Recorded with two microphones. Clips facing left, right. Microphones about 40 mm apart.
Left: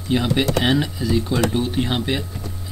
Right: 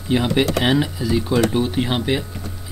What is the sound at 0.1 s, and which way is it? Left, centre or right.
Speech, centre.